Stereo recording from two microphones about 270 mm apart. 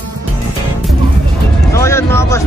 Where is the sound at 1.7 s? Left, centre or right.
Centre.